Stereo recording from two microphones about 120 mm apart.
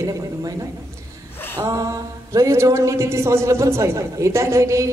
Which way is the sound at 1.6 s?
25° right (ahead or behind).